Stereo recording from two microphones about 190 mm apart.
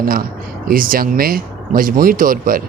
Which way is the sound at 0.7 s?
50° right (ahead or behind).